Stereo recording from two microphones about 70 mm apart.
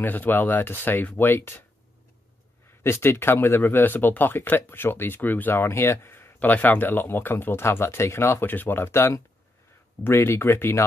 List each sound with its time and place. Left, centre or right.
0.0 s speech: left
2.8 s speech: left